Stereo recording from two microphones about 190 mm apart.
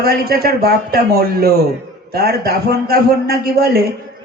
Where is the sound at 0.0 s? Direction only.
55° right (ahead or behind).